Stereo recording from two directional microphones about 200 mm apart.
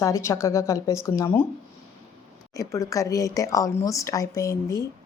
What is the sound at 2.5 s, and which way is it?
Speech, 15° left (ahead or behind).